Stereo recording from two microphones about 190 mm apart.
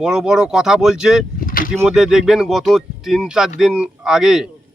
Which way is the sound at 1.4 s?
45° left (ahead or behind).